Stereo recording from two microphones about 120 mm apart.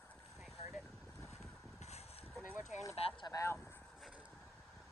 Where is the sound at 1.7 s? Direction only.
65° left (ahead or behind).